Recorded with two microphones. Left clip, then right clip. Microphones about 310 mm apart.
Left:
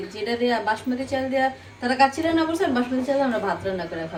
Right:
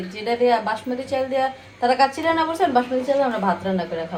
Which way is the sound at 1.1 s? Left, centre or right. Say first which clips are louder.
Right 1 dB; centre.